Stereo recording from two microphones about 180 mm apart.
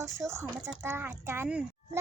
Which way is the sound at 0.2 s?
15° right (ahead or behind).